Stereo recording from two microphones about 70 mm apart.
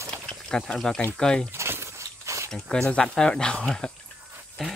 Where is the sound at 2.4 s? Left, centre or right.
Centre.